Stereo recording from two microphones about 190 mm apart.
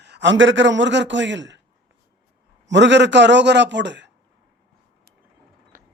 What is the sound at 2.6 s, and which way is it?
Speech, 70° right (ahead or behind).